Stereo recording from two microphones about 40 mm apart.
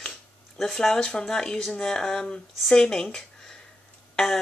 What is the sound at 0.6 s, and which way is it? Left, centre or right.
Speech, centre.